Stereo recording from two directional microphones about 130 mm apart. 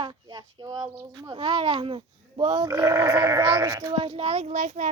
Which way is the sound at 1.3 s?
40° right (ahead or behind).